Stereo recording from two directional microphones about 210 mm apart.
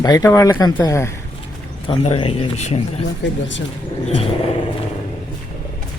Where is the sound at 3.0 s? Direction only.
60° left (ahead or behind).